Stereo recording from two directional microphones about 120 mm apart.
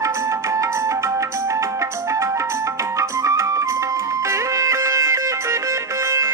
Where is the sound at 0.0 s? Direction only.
25° right (ahead or behind).